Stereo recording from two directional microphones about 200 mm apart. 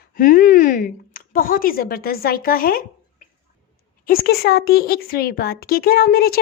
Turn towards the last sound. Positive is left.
turn(degrees=50)  # may be behind; listen again after turning